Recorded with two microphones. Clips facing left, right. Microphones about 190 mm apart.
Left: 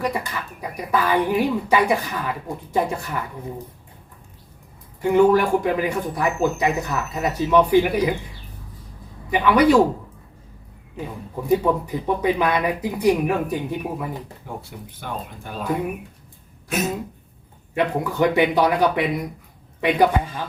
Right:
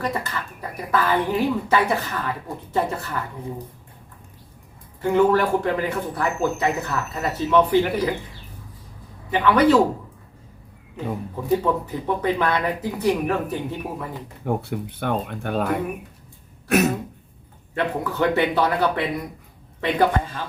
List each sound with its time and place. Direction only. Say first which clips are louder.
0.0 s speech: left 1 dB; 10° left (ahead or behind)
5.0 s speech: left 2 dB; 15° left (ahead or behind)
9.3 s speech: left 1 dB; 10° left (ahead or behind)
11.4 s speech: left 2 dB; 15° left (ahead or behind)
14.4 s speech: right 10 dB; 60° right (ahead or behind)
16.6 s throat clearing: right 6 dB; 65° right (ahead or behind)
17.7 s speech: left 3 dB; 15° left (ahead or behind)